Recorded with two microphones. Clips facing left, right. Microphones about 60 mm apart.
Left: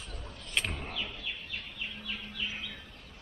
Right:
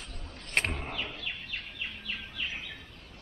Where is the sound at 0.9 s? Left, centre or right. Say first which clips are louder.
Right 2 dB; right.